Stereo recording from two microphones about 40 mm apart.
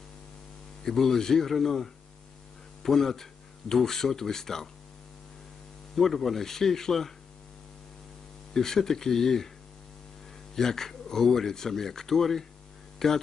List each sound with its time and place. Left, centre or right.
0.8 s speech: centre
5.9 s speech: centre
8.5 s speech: centre
10.5 s speech: centre